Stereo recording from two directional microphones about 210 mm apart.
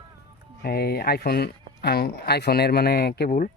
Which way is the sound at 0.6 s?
45° left (ahead or behind).